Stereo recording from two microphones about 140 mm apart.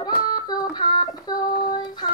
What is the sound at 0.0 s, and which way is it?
Child singing, 30° left (ahead or behind).